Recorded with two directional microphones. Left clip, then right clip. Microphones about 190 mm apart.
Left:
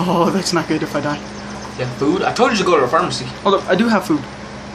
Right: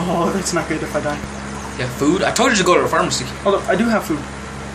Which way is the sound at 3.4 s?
25° left (ahead or behind).